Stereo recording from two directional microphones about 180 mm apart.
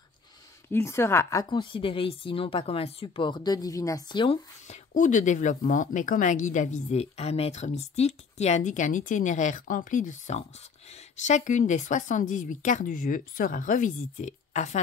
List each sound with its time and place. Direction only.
0.7 s speech: 15° left (ahead or behind)
4.6 s speech: 45° left (ahead or behind)